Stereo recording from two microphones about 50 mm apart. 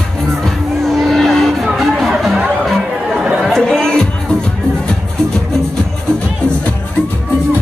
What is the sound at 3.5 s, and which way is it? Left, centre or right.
Music, centre.